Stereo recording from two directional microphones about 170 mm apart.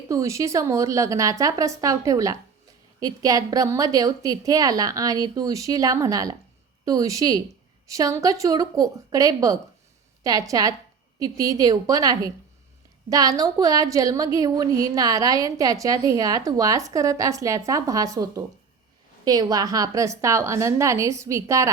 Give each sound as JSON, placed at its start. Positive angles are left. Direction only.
{"t": 0.1, "sound": "a woman's voice", "side_deg": -20}